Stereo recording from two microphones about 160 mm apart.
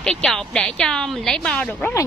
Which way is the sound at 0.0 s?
5° left (ahead or behind).